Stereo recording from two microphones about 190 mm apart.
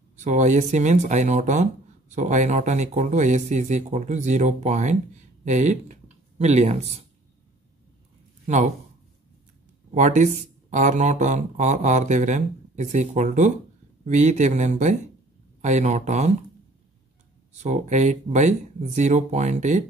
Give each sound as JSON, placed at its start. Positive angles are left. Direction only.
{"t": 0.1, "sound": "speech", "side_deg": -40}
{"t": 8.5, "sound": "speech", "side_deg": -40}
{"t": 9.9, "sound": "speech", "side_deg": -40}
{"t": 17.6, "sound": "speech", "side_deg": -40}